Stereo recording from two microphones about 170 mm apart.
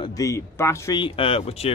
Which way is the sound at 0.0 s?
20° left (ahead or behind).